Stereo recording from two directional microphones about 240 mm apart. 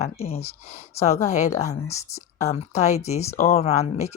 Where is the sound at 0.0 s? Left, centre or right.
Left.